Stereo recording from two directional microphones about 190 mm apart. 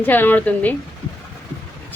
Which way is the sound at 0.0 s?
10° left (ahead or behind).